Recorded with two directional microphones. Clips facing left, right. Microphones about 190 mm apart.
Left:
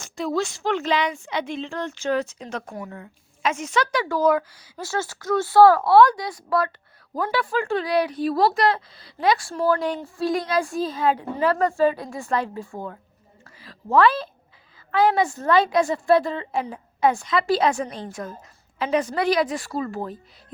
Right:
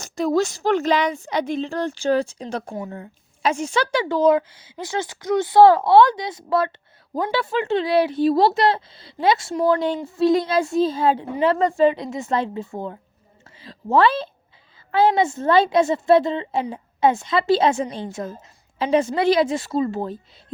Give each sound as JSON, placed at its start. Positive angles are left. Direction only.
{"t": 0.0, "sound": "a woman's voice", "side_deg": -40}